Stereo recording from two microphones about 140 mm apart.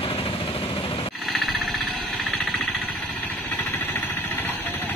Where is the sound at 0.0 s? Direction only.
40° left (ahead or behind).